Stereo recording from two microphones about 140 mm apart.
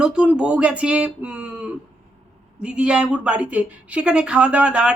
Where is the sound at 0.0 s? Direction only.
5° right (ahead or behind).